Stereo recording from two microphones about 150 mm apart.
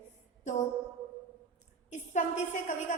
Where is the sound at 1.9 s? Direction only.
55° left (ahead or behind).